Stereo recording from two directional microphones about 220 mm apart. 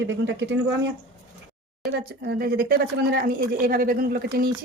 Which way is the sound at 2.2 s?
45° right (ahead or behind).